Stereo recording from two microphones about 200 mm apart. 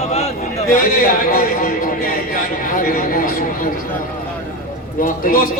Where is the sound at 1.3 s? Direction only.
45° left (ahead or behind).